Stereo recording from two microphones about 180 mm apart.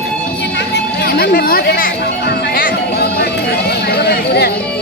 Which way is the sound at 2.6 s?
65° left (ahead or behind).